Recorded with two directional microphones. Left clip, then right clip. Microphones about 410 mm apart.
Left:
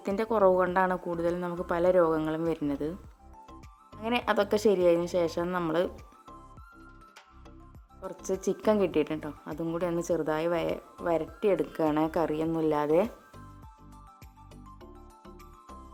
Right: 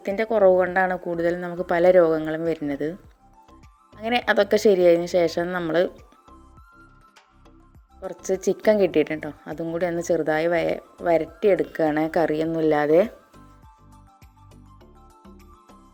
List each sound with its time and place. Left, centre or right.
0.0 s a woman's voice: centre
4.0 s a woman's voice: centre
8.0 s a woman's voice: centre